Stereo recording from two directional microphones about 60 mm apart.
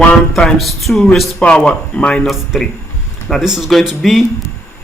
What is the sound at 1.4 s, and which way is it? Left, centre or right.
Speech, centre.